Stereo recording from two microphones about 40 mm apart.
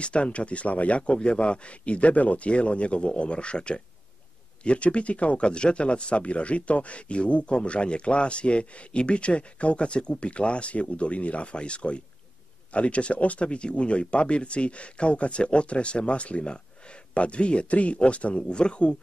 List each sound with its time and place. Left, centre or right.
0.0 s a man's voice: left